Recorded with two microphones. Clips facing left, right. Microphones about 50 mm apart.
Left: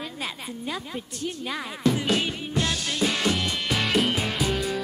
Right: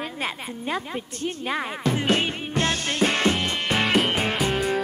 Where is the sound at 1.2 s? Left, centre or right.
Right.